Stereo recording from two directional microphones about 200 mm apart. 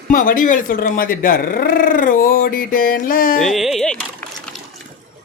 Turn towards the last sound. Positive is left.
turn(degrees=5)  # may be behind; listen again after turning